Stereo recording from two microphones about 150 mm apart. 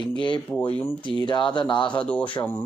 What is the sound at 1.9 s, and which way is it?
Speech, 10° left (ahead or behind).